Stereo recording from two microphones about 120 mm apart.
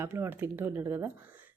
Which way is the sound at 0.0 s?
20° right (ahead or behind).